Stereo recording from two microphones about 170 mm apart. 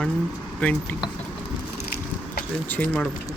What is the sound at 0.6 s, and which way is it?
Speech, 10° left (ahead or behind).